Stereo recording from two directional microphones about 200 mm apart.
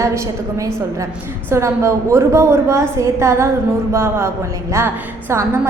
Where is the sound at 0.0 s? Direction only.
15° right (ahead or behind).